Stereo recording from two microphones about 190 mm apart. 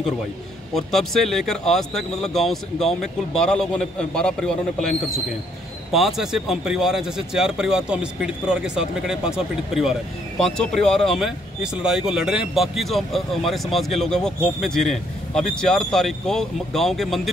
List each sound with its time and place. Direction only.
0.7 s speech: centre (ahead or behind)